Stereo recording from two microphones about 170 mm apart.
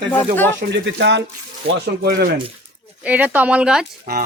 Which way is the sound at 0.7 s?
90° right.